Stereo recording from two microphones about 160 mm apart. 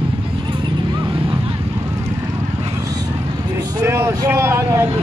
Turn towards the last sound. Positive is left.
turn(degrees=-15)  # may be behind; listen again after turning